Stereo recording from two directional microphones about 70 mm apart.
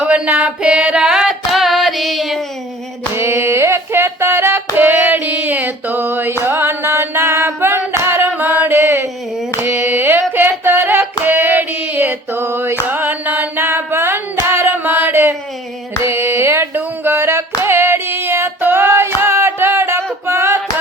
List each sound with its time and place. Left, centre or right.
0.1 s singing: right; by 2.4 s centre
3.2 s a sound: right
12.9 s music: right
16.0 s singing: right